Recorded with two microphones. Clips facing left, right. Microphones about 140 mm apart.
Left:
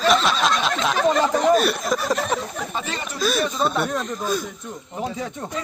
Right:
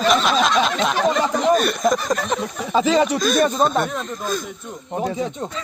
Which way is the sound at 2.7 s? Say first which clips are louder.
Right 13 dB; 90° right.